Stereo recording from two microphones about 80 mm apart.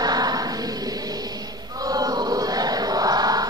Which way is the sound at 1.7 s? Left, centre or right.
Right.